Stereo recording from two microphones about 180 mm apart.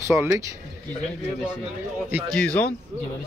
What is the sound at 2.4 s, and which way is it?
Speech, 5° left (ahead or behind).